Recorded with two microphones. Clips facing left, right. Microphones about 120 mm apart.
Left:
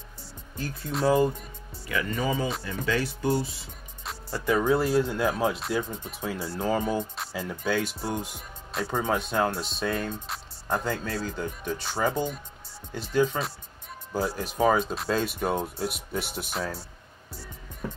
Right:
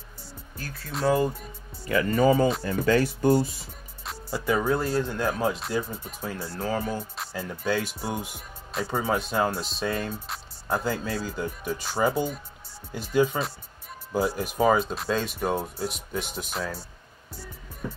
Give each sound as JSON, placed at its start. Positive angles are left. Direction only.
{"t": 0.6, "sound": "speech", "side_deg": 20}
{"t": 0.9, "sound": "speech", "side_deg": 0}
{"t": 1.9, "sound": "speech", "side_deg": -40}
{"t": 4.0, "sound": "music", "side_deg": 0}
{"t": 4.7, "sound": "speech", "side_deg": 5}
{"t": 6.0, "sound": "speech", "side_deg": 10}